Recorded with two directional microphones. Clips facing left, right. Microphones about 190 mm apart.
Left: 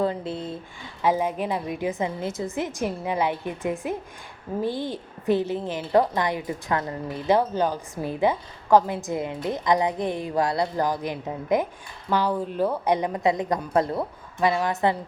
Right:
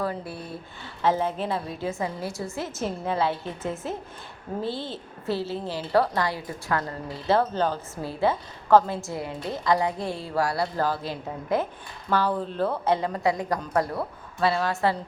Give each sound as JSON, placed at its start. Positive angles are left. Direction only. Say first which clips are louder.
{"t": 0.0, "sound": "a woman's voice", "louder": "left 4 dB", "side_deg": 20}